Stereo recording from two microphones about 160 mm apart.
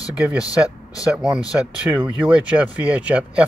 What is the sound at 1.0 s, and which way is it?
Speech, 5° right (ahead or behind).